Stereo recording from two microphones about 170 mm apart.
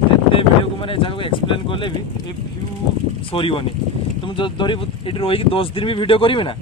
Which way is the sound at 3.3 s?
30° left (ahead or behind).